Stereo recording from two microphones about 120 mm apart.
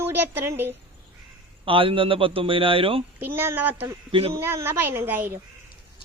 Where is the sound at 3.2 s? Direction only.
20° right (ahead or behind).